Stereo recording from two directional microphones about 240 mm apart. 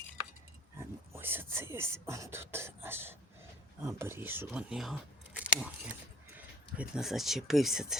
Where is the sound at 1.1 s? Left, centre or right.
Centre.